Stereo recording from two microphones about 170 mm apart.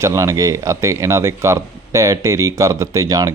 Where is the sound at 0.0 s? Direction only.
15° right (ahead or behind).